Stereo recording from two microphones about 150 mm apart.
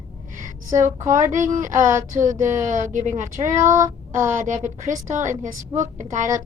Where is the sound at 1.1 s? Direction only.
55° right (ahead or behind).